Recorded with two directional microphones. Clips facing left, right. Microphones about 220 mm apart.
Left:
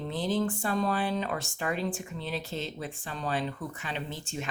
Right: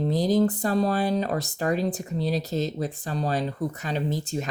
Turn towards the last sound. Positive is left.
turn(degrees=-40)  # may be behind; listen again after turning